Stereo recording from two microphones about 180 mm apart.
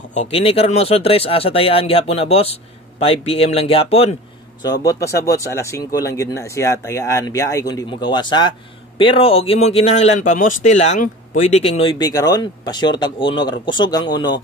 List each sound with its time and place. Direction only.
0.1 s speech: 40° left (ahead or behind)
4.8 s speech: 15° left (ahead or behind)